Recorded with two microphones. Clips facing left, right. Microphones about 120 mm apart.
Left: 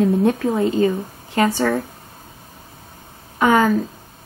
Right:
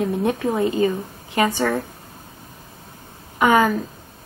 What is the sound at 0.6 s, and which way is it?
Speech, 25° left (ahead or behind).